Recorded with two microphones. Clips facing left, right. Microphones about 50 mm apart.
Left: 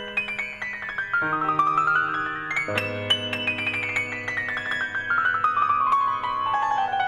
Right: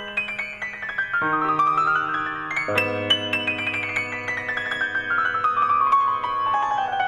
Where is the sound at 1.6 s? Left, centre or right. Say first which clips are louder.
Right 1 dB; right.